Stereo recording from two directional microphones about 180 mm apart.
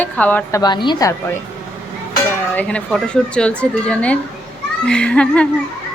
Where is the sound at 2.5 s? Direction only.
5° left (ahead or behind).